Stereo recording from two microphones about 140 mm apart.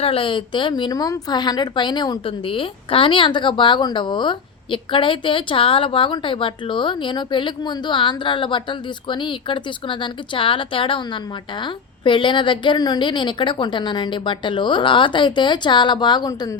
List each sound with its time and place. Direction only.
0.0 s a woman's voice: 40° left (ahead or behind)